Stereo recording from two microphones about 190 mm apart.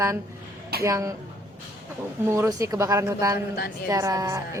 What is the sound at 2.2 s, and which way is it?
Speech, 15° right (ahead or behind).